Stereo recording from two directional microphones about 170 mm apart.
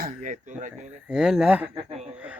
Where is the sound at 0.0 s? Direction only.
50° right (ahead or behind).